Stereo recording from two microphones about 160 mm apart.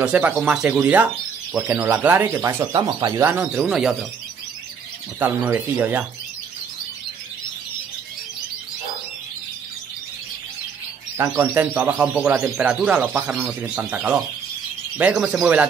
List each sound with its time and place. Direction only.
0.0 s speech: 10° right (ahead or behind); by 3.2 s 25° right (ahead or behind)
3.2 s speech: 10° right (ahead or behind)
5.2 s speech: 10° right (ahead or behind)
11.1 s speech: 15° right (ahead or behind)